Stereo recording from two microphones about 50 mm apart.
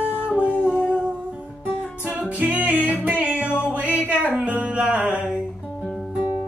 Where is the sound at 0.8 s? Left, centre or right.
Right.